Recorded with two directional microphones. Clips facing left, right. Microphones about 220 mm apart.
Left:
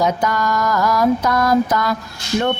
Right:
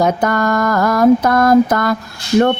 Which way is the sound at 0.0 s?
55° right (ahead or behind).